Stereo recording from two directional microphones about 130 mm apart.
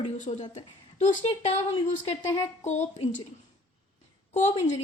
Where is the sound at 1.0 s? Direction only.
55° left (ahead or behind).